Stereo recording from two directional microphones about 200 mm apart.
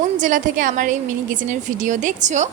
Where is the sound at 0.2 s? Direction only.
40° right (ahead or behind).